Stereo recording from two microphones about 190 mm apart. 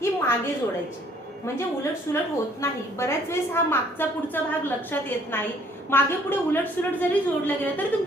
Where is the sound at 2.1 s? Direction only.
15° left (ahead or behind).